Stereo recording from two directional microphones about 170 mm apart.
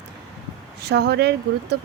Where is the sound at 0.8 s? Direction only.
80° right.